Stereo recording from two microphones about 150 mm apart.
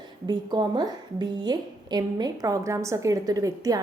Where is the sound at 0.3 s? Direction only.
30° right (ahead or behind).